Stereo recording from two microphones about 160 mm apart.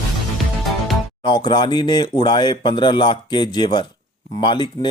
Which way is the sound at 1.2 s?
25° left (ahead or behind).